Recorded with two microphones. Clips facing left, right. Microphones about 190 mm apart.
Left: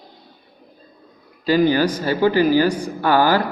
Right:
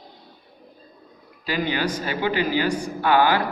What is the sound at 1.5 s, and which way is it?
A man's voice, 35° left (ahead or behind).